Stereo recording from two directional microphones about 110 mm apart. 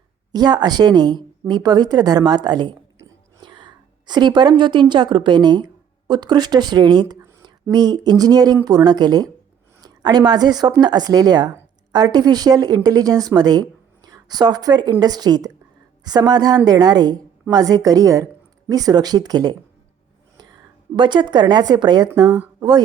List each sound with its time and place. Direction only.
0.3 s a woman's voice: 40° right (ahead or behind)
20.9 s a woman's voice: 45° right (ahead or behind)